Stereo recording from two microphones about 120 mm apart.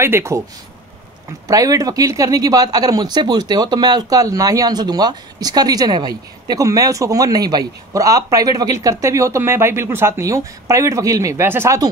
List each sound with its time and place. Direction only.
0.0 s speech: 20° right (ahead or behind)
1.5 s speech: 30° right (ahead or behind)